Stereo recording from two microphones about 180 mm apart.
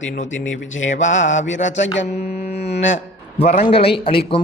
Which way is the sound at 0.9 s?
40° left (ahead or behind).